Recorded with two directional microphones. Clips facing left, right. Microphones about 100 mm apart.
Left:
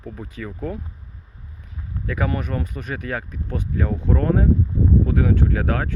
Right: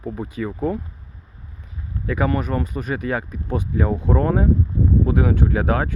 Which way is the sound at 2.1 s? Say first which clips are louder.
Right 4 dB; 5° right (ahead or behind).